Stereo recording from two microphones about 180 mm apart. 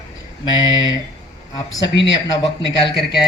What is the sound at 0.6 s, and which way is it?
Speech, 90° left.